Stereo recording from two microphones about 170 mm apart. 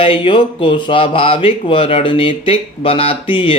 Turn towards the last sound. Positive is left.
turn(degrees=30)  # may be behind; listen again after turning